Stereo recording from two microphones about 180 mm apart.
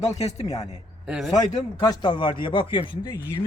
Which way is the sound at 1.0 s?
5° right (ahead or behind).